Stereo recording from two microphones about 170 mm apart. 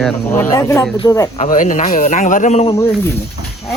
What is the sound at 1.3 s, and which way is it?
Speech, 50° left (ahead or behind).